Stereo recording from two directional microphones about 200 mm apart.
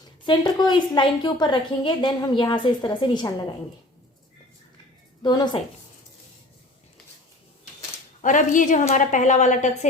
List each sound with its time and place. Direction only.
0.3 s a woman's voice: 20° left (ahead or behind)
5.2 s a woman's voice: 20° left (ahead or behind)
8.2 s speech: 40° left (ahead or behind)